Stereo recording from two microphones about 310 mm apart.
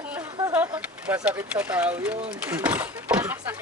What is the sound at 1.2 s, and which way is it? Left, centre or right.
Speech, centre.